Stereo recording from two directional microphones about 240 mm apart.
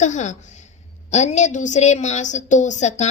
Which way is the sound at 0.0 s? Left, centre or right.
Left.